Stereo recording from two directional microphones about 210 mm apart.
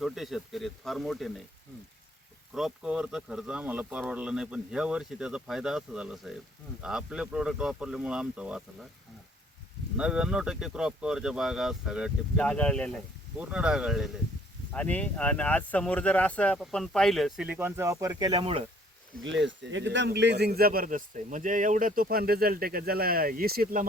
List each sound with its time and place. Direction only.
0.0 s speech: centre (ahead or behind)
2.5 s speech: centre (ahead or behind)
10.0 s speech: 5° right (ahead or behind)
13.3 s speech: 5° right (ahead or behind); by 18.6 s 25° right (ahead or behind)
19.5 s speech: 60° right (ahead or behind)